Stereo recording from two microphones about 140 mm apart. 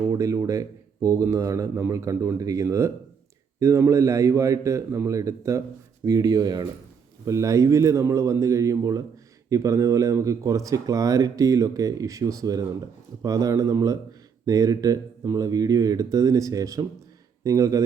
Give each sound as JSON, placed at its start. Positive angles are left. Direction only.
{"t": 0.2, "sound": "speech", "side_deg": -25}